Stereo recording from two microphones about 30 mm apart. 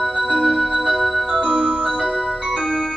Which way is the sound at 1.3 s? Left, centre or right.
Right.